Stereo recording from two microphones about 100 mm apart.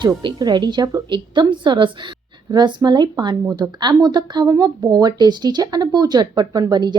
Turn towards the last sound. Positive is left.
turn(degrees=-45)  # may be behind; listen again after turning